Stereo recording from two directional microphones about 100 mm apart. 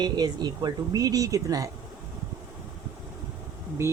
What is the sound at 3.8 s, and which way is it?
Speech, 30° right (ahead or behind).